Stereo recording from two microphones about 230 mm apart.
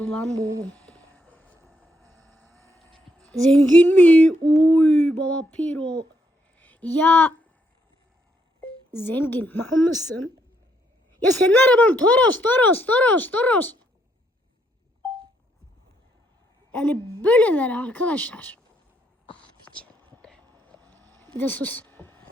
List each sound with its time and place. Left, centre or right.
0.0 s a sound: centre
0.3 s speech: centre
0.7 s a sound: centre
6.6 s speech: centre
8.9 s speech: centre
11.5 s speech: centre
16.7 s speech: centre
19.7 s whispering: centre